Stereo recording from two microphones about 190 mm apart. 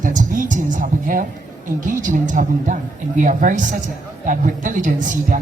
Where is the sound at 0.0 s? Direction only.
40° right (ahead or behind).